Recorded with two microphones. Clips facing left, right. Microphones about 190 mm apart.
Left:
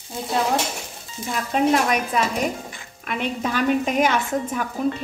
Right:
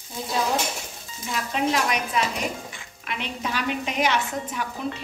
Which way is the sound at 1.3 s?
50° left (ahead or behind).